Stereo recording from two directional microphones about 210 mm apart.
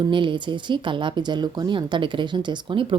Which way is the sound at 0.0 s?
25° right (ahead or behind).